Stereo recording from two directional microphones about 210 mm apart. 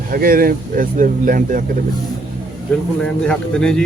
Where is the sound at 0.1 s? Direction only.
45° right (ahead or behind).